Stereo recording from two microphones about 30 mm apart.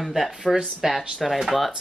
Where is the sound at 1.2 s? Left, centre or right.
Centre.